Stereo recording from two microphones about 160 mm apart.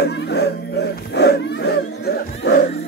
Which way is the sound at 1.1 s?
90° left.